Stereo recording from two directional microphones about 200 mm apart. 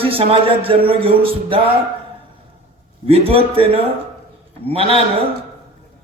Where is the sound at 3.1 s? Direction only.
30° right (ahead or behind).